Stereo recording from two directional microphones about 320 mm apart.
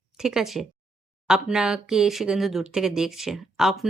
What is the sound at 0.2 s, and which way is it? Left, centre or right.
Speech, centre.